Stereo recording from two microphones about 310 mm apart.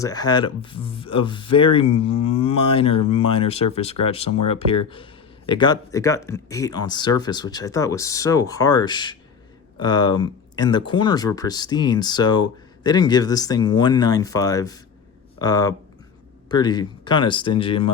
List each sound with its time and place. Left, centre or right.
0.0 s speech: centre